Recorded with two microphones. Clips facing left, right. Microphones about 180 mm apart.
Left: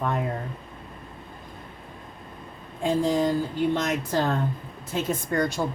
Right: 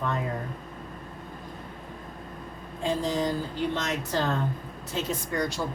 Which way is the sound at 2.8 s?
50° left (ahead or behind).